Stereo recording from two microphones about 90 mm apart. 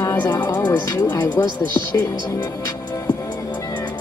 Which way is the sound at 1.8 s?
30° left (ahead or behind).